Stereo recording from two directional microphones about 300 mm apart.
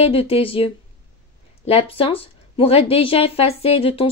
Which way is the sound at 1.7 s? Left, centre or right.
Centre.